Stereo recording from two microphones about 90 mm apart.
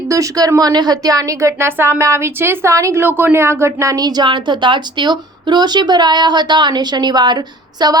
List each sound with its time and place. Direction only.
0.1 s a woman's voice: 40° right (ahead or behind)
3.0 s speech: 20° right (ahead or behind); by 7.9 s 50° right (ahead or behind)